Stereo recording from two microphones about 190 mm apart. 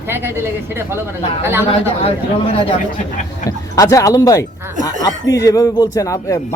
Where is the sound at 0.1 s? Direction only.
10° right (ahead or behind).